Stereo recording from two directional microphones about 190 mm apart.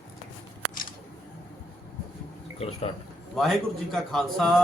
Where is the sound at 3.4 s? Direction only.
Centre (ahead or behind).